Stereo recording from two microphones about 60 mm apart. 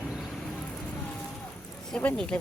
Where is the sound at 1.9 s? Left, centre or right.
Left.